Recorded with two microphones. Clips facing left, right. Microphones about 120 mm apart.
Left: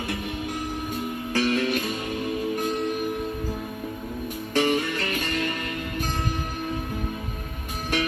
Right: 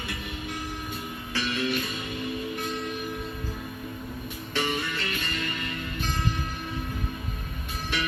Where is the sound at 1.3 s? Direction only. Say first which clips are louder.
Left 6 dB; 45° left (ahead or behind).